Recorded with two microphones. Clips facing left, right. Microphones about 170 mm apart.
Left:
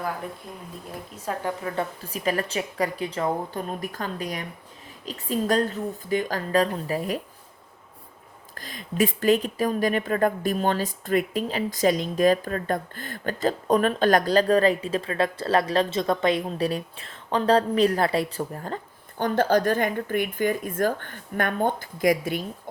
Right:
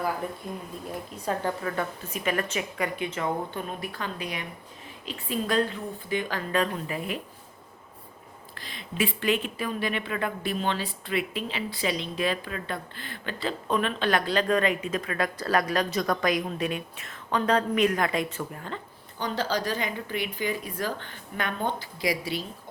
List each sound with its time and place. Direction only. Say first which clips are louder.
1.1 s a woman's voice: right 1 dB; 5° left (ahead or behind)
1.5 s speech: left 1 dB; 25° left (ahead or behind)
8.5 s speech: left 5 dB; 45° left (ahead or behind)
19.2 s speech: left 7 dB; 55° left (ahead or behind)